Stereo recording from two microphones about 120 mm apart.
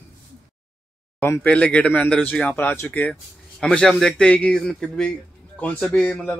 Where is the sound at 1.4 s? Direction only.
10° left (ahead or behind).